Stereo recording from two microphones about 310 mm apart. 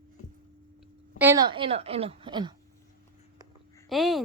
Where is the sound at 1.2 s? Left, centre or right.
Centre.